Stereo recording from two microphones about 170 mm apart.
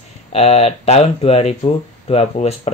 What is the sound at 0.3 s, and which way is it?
Speech, 40° left (ahead or behind).